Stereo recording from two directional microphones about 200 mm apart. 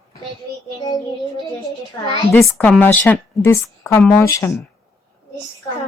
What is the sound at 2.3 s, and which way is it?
A woman's voice, 10° left (ahead or behind).